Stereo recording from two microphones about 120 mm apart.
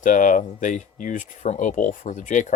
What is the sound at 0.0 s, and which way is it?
Speech, 90° left.